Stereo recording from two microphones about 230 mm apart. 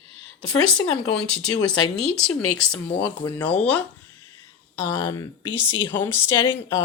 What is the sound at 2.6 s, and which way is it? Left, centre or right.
Speech, centre.